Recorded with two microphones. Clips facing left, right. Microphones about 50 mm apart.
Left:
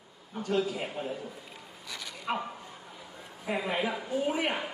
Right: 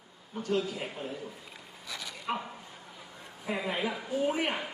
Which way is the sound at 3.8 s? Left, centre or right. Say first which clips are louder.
Even; left.